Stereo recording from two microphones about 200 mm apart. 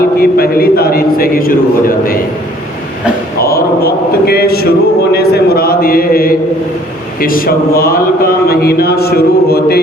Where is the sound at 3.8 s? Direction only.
50° left (ahead or behind).